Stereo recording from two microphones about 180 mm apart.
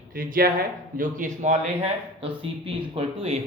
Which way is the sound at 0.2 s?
55° right (ahead or behind).